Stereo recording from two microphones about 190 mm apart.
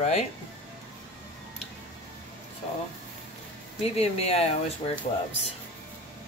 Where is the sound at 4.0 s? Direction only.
35° left (ahead or behind).